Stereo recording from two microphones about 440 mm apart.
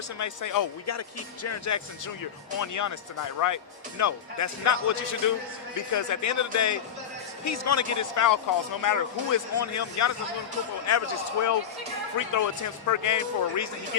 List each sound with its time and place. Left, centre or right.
0.2 s speech: left